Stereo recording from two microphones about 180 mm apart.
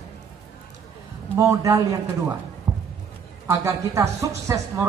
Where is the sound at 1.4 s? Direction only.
15° right (ahead or behind).